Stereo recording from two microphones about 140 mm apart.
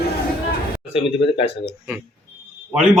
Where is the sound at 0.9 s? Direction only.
45° left (ahead or behind).